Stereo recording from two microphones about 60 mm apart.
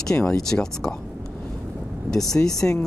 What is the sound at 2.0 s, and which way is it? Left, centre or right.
Speech, centre.